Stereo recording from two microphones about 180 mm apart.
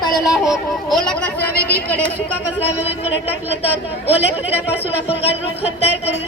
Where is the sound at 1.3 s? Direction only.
60° left (ahead or behind).